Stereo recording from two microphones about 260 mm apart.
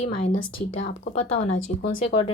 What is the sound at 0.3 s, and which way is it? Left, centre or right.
Speech, left.